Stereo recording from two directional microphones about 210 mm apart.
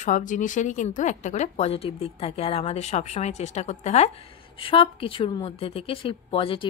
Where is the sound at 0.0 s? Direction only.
35° left (ahead or behind).